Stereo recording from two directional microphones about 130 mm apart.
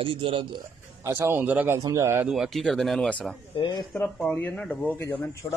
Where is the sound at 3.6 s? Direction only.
35° left (ahead or behind).